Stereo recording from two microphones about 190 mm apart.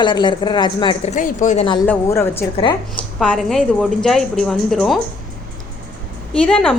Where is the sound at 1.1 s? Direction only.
40° left (ahead or behind).